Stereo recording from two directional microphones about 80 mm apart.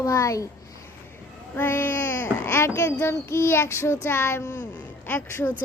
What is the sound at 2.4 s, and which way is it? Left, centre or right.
Child singing, left.